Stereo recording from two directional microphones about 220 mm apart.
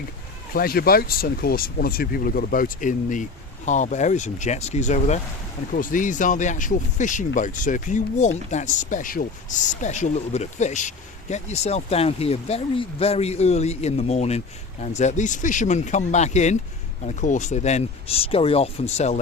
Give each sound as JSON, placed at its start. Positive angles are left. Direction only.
{"t": 0.5, "sound": "speech", "side_deg": 40}